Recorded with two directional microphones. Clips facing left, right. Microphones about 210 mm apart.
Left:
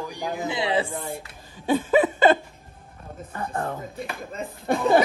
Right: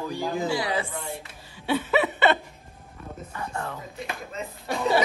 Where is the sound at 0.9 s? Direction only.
50° left (ahead or behind).